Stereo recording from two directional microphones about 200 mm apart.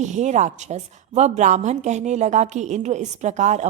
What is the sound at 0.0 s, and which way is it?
A woman's voice, 35° right (ahead or behind).